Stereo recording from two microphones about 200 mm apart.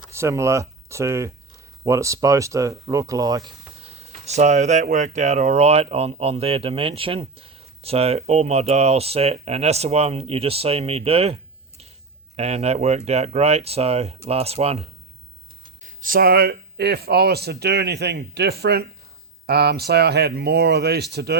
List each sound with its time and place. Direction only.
0.1 s speech: 15° right (ahead or behind)
3.8 s speech: 30° right (ahead or behind)
12.4 s speech: 30° right (ahead or behind)
15.8 s speech: 40° right (ahead or behind)